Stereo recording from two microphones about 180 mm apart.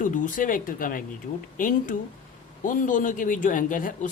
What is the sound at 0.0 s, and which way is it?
Speech, 45° left (ahead or behind).